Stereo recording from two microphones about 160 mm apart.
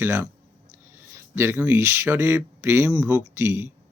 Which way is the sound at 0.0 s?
15° right (ahead or behind).